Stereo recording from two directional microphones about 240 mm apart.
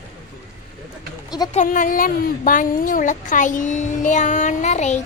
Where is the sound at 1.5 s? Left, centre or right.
Left.